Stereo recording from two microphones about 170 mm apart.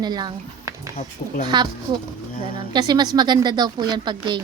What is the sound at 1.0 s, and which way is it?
Speech, 50° left (ahead or behind).